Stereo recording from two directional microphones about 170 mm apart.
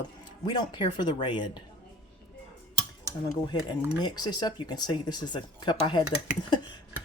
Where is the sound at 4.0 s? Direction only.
25° left (ahead or behind).